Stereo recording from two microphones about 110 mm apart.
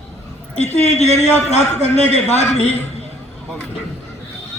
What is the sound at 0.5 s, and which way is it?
A man's voice, 80° left.